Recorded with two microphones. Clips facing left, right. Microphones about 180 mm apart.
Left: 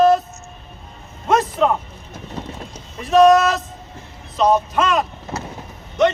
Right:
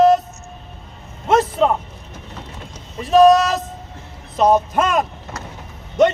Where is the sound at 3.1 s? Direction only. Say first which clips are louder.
Right 1 dB; 35° right (ahead or behind).